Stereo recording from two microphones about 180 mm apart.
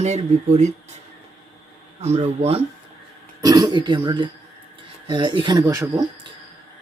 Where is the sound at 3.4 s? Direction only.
25° right (ahead or behind).